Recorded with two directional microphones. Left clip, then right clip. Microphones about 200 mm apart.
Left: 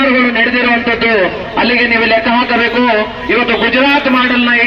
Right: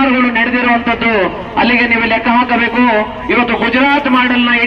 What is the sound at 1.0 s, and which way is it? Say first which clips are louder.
A man's voice: left 2 dB; 30° left (ahead or behind).